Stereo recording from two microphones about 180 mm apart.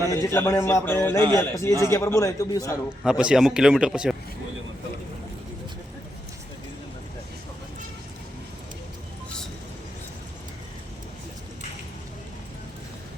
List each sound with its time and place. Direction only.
0.1 s a man's voice: 15° left (ahead or behind)
3.0 s speech: 5° right (ahead or behind)